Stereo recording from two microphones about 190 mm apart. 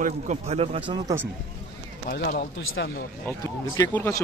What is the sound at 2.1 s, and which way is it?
Speech, 55° left (ahead or behind).